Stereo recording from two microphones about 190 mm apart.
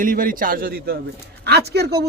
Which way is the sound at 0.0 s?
45° right (ahead or behind).